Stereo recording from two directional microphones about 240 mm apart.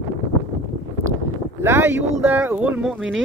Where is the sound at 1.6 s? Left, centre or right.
Centre.